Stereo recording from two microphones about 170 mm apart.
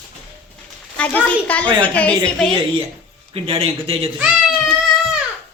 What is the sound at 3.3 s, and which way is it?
Speech, 35° right (ahead or behind).